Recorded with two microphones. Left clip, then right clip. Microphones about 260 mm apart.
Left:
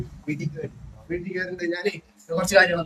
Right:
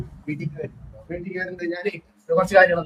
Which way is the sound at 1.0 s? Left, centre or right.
Centre.